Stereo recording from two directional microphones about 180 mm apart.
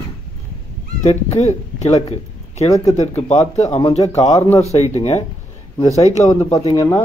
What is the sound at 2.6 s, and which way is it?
Speech, 20° left (ahead or behind).